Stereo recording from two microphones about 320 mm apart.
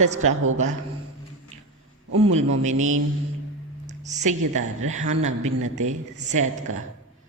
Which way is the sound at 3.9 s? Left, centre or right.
Right.